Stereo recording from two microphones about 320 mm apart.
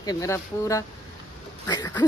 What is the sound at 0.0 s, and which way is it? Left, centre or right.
Speech, centre.